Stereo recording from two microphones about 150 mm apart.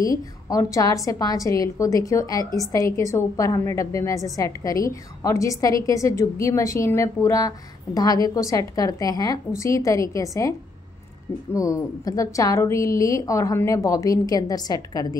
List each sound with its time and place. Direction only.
0.0 s a woman's voice: 25° left (ahead or behind)
11.5 s a woman's voice: 20° left (ahead or behind)